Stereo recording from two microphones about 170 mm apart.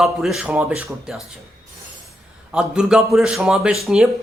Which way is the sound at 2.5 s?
5° right (ahead or behind).